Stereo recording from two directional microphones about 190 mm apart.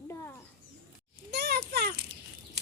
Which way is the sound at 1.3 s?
60° right (ahead or behind).